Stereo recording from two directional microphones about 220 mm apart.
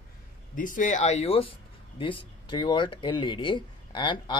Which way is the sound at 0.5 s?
35° left (ahead or behind).